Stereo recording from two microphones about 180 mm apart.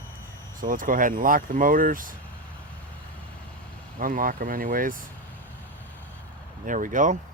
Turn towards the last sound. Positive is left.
turn(degrees=-45)  # may be behind; listen again after turning